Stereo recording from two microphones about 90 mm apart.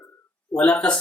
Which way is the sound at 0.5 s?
10° left (ahead or behind).